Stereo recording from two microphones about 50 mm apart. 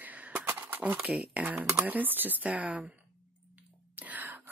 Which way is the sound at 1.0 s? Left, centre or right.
Right.